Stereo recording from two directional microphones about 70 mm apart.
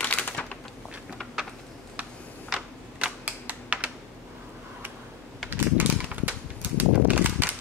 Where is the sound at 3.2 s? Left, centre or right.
Centre.